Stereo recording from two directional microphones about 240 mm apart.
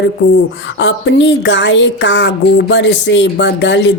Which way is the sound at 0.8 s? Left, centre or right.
Left.